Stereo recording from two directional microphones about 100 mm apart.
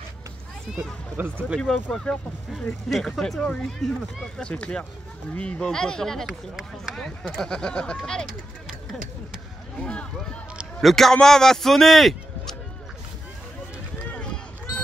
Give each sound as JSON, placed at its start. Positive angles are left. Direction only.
{"t": 0.7, "sound": "speech", "side_deg": -5}
{"t": 1.1, "sound": "speech", "side_deg": -20}
{"t": 1.6, "sound": "speech", "side_deg": 10}
{"t": 9.8, "sound": "a man's voice", "side_deg": 10}
{"t": 14.0, "sound": "run", "side_deg": 10}